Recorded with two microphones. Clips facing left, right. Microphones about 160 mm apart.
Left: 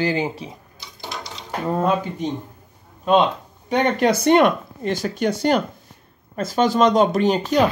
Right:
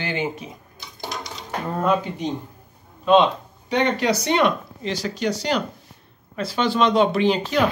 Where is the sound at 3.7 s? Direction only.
50° left (ahead or behind).